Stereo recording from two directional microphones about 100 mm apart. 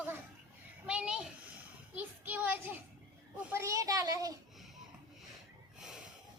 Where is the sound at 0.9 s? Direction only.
10° right (ahead or behind).